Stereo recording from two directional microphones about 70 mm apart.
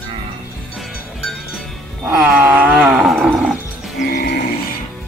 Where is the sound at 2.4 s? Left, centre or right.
Right.